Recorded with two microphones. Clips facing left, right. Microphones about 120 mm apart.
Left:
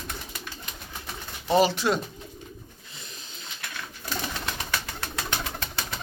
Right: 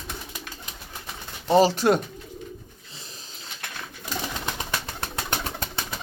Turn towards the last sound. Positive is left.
turn(degrees=-35)  # may be behind; listen again after turning